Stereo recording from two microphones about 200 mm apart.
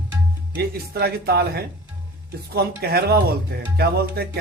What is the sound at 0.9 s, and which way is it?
A man's voice, 50° right (ahead or behind).